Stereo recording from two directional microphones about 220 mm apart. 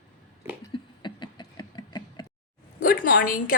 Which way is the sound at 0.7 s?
20° left (ahead or behind).